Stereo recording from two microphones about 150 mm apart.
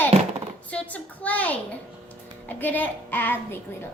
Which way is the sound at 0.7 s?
10° left (ahead or behind).